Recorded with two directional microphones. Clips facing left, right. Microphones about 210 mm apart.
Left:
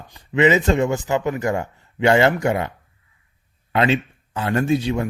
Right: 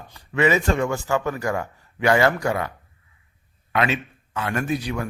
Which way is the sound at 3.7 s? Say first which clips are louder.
Left 4 dB; 30° left (ahead or behind).